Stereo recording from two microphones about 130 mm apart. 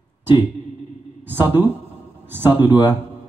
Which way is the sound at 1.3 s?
15° right (ahead or behind).